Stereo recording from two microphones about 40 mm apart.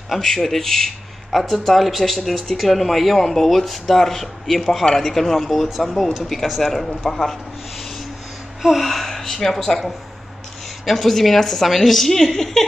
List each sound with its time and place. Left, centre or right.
0.2 s speech: centre
8.6 s speech: centre